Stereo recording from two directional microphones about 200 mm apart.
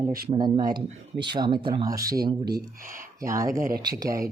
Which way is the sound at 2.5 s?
50° right (ahead or behind).